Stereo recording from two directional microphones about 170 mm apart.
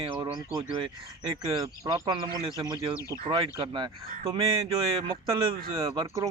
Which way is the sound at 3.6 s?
25° right (ahead or behind).